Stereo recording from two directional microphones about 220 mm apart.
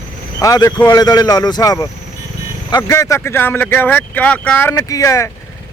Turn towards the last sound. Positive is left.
turn(degrees=15)  # may be behind; listen again after turning